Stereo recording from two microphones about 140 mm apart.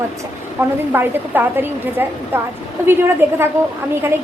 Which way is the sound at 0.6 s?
15° right (ahead or behind).